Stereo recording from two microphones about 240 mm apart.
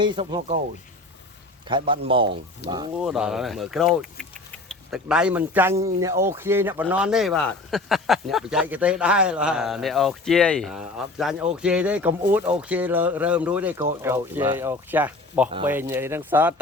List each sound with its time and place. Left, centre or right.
0.0 s speech: centre
1.7 s speech: centre
3.0 s speech: centre